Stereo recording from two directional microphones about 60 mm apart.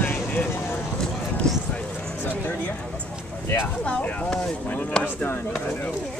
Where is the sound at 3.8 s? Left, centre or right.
Centre.